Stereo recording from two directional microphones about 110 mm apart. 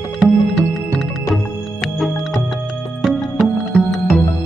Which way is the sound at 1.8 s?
Centre (ahead or behind).